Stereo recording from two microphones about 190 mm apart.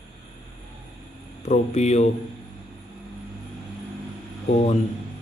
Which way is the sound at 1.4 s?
35° left (ahead or behind).